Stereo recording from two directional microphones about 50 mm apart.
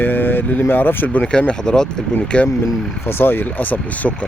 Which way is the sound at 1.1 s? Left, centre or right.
Left.